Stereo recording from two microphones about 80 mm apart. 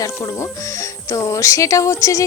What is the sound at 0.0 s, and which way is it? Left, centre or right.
Speech, left.